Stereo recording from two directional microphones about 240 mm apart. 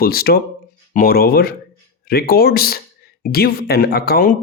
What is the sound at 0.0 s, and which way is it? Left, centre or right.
Speech, left.